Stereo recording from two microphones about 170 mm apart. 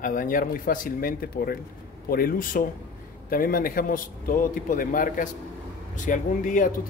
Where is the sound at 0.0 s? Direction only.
55° left (ahead or behind).